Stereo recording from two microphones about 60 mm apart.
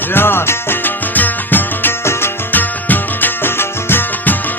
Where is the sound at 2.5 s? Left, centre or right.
Left.